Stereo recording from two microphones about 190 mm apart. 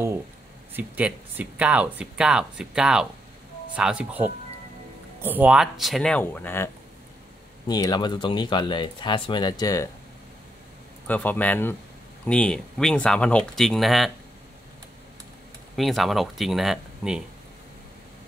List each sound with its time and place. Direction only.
0.7 s speech: 10° right (ahead or behind); by 9.8 s 20° left (ahead or behind)
11.1 s speech: 10° left (ahead or behind)
15.7 s speech: centre (ahead or behind)